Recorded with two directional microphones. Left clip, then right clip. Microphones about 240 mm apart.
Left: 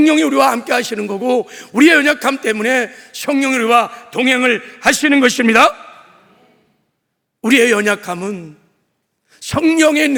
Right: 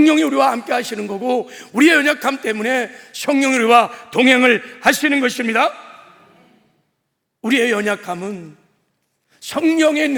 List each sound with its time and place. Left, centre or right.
0.0 s a man's voice: centre
3.1 s a man's voice: centre
4.8 s a man's voice: centre; by 5.7 s left
7.4 s a man's voice: left